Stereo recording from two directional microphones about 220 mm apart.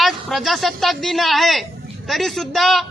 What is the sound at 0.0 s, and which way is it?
A woman's voice, centre (ahead or behind).